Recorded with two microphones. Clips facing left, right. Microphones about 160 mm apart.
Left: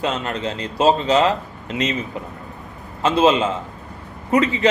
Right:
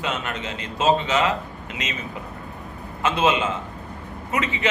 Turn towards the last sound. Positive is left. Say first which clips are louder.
# left 8 dB
turn(degrees=35)  # may be behind; listen again after turning